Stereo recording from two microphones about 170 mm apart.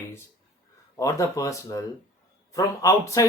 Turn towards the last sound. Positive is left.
turn(degrees=20)  # may be behind; listen again after turning